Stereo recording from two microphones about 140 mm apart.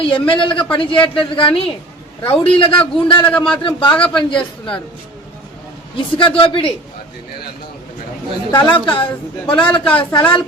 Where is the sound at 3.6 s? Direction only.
40° left (ahead or behind).